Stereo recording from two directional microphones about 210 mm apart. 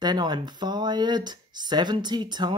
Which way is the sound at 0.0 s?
20° right (ahead or behind).